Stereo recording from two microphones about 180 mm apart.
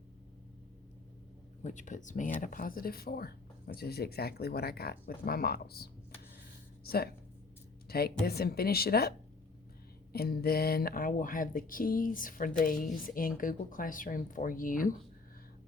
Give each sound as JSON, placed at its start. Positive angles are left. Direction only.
{"t": 1.6, "sound": "speech", "side_deg": 45}